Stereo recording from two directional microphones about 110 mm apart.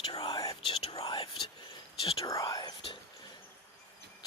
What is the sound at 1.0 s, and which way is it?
Whispering, 50° left (ahead or behind).